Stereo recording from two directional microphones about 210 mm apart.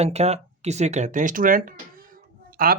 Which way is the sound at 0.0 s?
30° right (ahead or behind).